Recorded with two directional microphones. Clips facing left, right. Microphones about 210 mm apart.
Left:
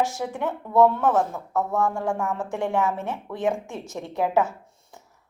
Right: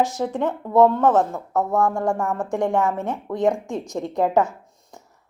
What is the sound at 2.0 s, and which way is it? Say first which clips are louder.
Speech: right 3 dB; 50° right (ahead or behind).